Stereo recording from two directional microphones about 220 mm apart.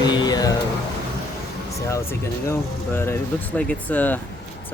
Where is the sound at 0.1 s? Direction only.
15° left (ahead or behind).